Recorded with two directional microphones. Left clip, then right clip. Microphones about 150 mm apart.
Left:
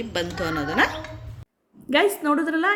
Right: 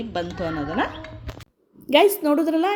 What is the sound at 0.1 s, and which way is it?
A woman's voice, 25° right (ahead or behind).